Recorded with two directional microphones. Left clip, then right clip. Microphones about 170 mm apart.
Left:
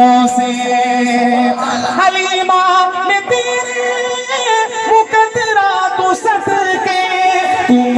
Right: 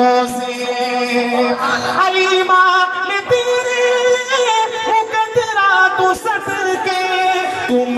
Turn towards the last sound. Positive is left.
turn(degrees=30)  # may be behind; listen again after turning